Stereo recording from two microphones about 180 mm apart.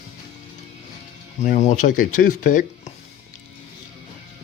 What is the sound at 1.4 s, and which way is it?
Speech, 40° left (ahead or behind).